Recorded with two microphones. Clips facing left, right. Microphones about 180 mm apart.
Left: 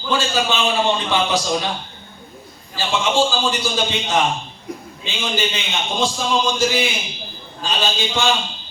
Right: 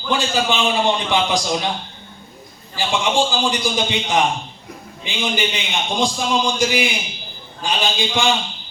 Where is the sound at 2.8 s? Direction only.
15° right (ahead or behind).